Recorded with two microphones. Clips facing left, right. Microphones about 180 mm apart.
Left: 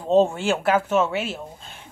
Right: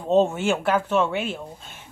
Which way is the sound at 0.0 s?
Centre (ahead or behind).